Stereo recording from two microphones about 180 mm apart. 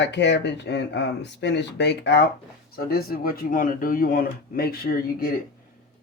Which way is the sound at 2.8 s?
55° left (ahead or behind).